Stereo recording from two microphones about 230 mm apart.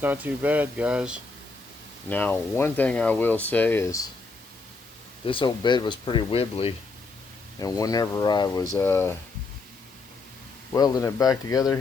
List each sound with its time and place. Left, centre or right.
0.0 s speech: centre
2.0 s speech: centre
5.2 s speech: left
10.8 s speech: centre